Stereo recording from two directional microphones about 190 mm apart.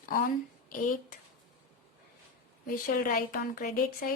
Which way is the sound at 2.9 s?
50° left (ahead or behind).